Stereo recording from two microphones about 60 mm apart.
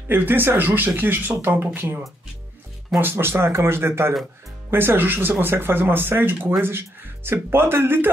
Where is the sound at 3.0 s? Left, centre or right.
Right.